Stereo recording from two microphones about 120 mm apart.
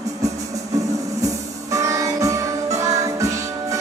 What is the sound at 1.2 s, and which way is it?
Music, 25° right (ahead or behind).